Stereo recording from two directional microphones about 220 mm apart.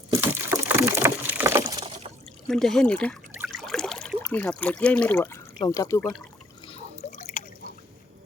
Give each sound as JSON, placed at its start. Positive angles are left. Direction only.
{"t": 0.1, "sound": "a sound", "side_deg": -15}
{"t": 2.5, "sound": "speech", "side_deg": 0}
{"t": 3.3, "sound": "water", "side_deg": 0}
{"t": 4.2, "sound": "speech", "side_deg": 5}
{"t": 6.7, "sound": "drip", "side_deg": 30}